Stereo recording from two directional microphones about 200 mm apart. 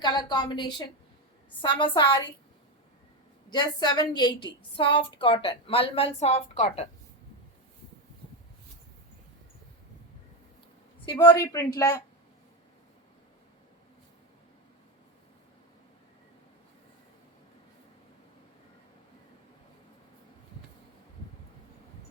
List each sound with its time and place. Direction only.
0.0 s a woman's voice: 20° left (ahead or behind)
3.5 s a woman's voice: 20° left (ahead or behind)
11.0 s speech: 15° left (ahead or behind)